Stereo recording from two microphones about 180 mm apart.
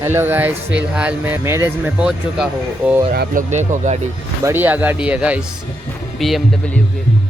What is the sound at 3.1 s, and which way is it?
Speech, 60° right (ahead or behind).